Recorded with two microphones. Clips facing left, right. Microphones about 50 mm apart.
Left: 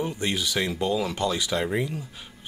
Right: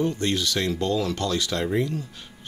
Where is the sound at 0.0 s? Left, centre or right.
Centre.